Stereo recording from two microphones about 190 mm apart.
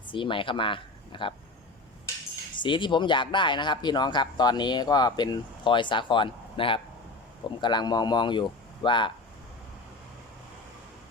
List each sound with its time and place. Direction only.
0.1 s speech: 25° left (ahead or behind)
2.6 s speech: 25° left (ahead or behind)